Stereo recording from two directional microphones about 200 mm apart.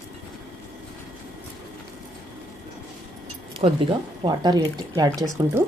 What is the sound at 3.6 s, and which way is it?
Speech, 25° right (ahead or behind).